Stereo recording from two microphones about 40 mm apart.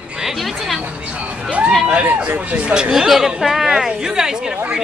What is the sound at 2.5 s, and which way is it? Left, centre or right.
Speech, right.